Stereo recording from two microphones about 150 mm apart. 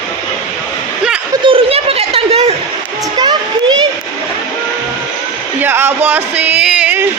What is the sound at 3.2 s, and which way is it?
Child singing, 30° right (ahead or behind).